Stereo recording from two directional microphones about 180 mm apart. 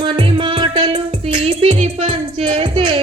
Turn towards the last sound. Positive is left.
turn(degrees=-25)  # may be behind; listen again after turning